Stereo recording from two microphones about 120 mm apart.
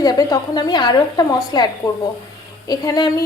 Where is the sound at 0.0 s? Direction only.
30° left (ahead or behind).